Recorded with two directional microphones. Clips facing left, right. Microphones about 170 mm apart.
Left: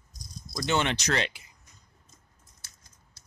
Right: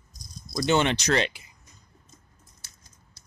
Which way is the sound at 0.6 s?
20° right (ahead or behind).